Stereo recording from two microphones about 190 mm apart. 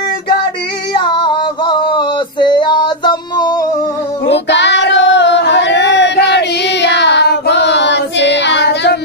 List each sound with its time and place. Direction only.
0.9 s male singing: 25° left (ahead or behind)
4.3 s female singing: 65° left (ahead or behind)